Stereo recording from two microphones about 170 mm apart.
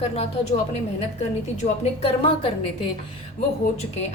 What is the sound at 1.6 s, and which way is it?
Speech, 35° left (ahead or behind).